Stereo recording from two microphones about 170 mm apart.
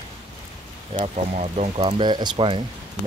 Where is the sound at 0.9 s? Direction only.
40° right (ahead or behind).